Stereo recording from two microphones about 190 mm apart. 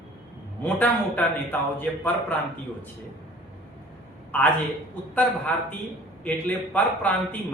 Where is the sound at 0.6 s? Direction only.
10° left (ahead or behind).